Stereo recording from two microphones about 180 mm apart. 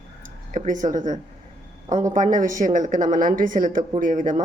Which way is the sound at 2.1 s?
45° right (ahead or behind).